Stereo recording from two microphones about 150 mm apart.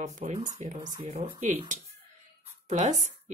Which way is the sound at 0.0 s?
50° right (ahead or behind).